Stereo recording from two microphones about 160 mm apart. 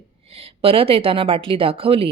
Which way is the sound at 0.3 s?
40° right (ahead or behind).